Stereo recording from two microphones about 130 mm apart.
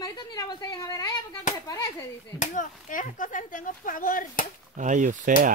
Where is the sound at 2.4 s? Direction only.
85° left.